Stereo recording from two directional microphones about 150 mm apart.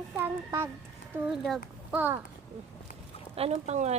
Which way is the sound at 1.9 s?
10° right (ahead or behind).